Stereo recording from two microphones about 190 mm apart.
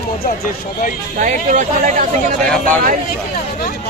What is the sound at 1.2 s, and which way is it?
Speech, 40° right (ahead or behind).